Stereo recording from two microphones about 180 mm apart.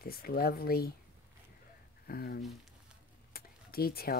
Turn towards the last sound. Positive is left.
turn(degrees=55)  # may be behind; listen again after turning